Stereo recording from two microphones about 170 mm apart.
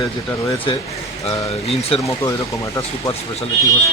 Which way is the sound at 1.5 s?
35° left (ahead or behind).